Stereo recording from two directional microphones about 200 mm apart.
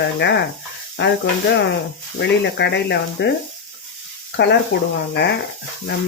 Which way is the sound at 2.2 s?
60° left (ahead or behind).